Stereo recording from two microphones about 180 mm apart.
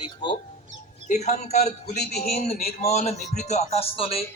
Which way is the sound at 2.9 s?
35° left (ahead or behind).